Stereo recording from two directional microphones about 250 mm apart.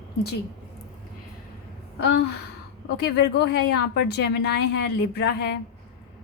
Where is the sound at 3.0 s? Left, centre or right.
Left.